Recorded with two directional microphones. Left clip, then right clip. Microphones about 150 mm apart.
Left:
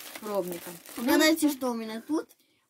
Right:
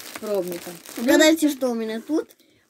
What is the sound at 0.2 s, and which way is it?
Crumpling, 45° right (ahead or behind).